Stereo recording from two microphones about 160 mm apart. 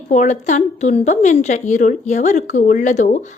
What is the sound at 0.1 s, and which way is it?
A woman's voice, 50° left (ahead or behind).